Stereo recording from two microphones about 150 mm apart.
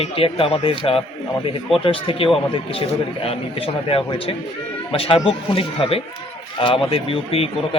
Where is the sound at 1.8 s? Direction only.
35° left (ahead or behind).